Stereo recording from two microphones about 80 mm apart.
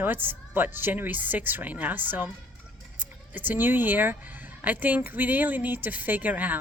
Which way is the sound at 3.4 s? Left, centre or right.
Right.